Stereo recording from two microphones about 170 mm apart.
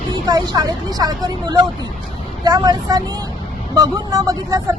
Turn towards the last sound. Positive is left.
turn(degrees=-20)  # may be behind; listen again after turning